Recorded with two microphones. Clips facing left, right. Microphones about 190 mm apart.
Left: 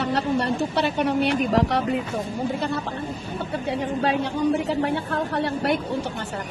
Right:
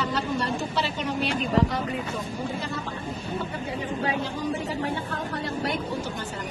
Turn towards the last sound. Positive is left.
turn(degrees=65)  # may be behind; listen again after turning